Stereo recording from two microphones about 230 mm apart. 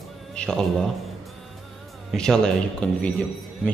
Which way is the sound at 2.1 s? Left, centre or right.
Centre.